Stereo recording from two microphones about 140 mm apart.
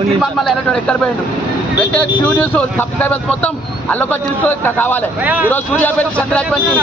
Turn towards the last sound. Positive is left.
turn(degrees=10)  # may be behind; listen again after turning